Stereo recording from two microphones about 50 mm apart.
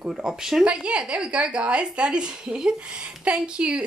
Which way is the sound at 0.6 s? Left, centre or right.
Right.